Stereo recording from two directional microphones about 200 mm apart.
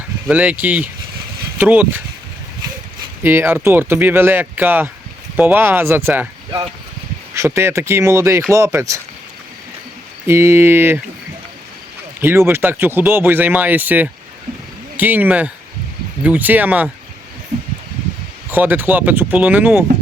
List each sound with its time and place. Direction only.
0.3 s speech: 5° right (ahead or behind)
3.2 s speech: 10° right (ahead or behind)
10.2 s speech: 15° right (ahead or behind)
12.2 s speech: 10° right (ahead or behind)
18.5 s speech: 10° right (ahead or behind)